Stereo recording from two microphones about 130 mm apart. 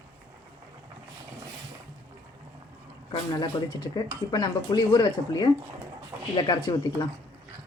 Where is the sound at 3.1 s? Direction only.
30° left (ahead or behind).